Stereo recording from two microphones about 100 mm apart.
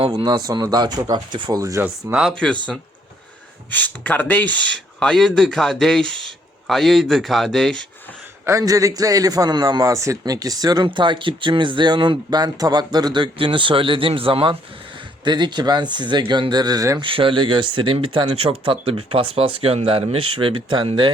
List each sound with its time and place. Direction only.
0.1 s speech: 45° right (ahead or behind)
1.5 s a man's voice: 35° right (ahead or behind)
2.3 s speech: 10° left (ahead or behind)
3.7 s speech: 15° left (ahead or behind)
8.4 s a man's voice: 35° right (ahead or behind)
10.8 s speech: 50° right (ahead or behind)
15.2 s speech: 50° right (ahead or behind)
17.0 s speech: 60° right (ahead or behind)